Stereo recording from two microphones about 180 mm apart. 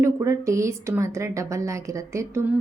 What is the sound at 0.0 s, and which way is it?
A woman's voice, 15° right (ahead or behind).